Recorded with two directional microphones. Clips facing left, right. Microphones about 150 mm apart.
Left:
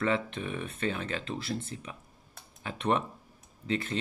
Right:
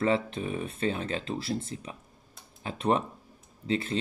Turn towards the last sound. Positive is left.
turn(degrees=-30)  # may be behind; listen again after turning